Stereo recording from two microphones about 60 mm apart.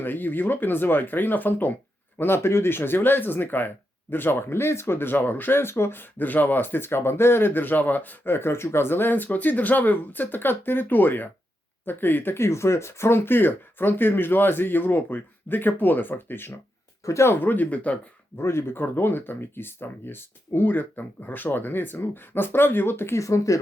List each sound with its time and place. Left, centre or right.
0.0 s speech: left
17.1 s speech: left
18.3 s speech: left
23.1 s speech: left